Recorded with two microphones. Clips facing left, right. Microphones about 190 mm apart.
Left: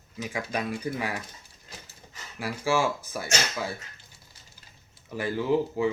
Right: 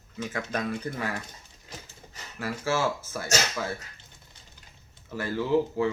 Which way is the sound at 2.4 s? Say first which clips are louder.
Left 1 dB; 15° left (ahead or behind).